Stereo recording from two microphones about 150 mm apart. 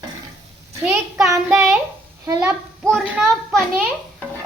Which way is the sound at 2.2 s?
20° right (ahead or behind).